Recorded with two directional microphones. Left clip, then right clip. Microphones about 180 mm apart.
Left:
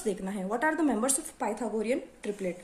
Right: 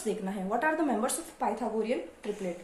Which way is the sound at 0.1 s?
40° left (ahead or behind).